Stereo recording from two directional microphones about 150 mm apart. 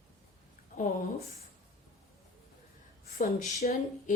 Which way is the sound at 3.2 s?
55° left (ahead or behind).